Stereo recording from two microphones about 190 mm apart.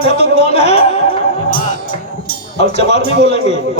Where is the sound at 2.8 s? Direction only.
35° left (ahead or behind).